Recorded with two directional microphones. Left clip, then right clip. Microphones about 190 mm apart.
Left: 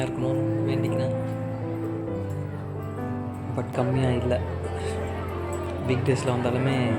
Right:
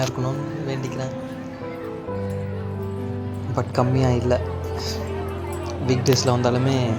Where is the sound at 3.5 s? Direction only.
25° right (ahead or behind).